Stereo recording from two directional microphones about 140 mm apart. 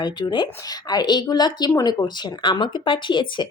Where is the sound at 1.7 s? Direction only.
20° left (ahead or behind); by 3.2 s 35° left (ahead or behind).